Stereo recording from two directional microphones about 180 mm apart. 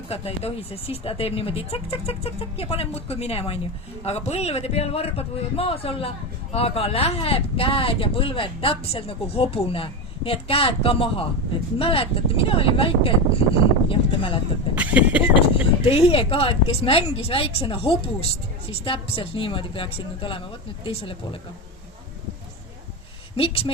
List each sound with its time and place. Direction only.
0.1 s a man's voice: 35° left (ahead or behind)
14.8 s speech: 10° right (ahead or behind)
15.4 s a man's voice: 30° left (ahead or behind)
23.4 s a man's voice: 30° left (ahead or behind)